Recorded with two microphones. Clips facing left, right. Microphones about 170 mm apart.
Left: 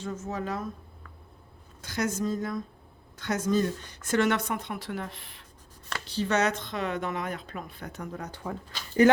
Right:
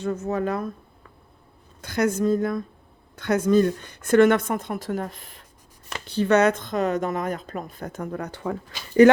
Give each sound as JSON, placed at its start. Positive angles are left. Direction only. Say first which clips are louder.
{"t": 0.0, "sound": "a woman's voice", "louder": "right 8 dB", "side_deg": -60}
{"t": 1.8, "sound": "a woman's voice", "louder": "right 7 dB", "side_deg": -60}
{"t": 6.1, "sound": "speech", "louder": "right 8 dB", "side_deg": -55}